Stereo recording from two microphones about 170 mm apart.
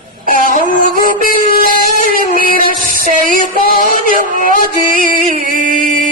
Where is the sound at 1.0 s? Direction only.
55° left (ahead or behind).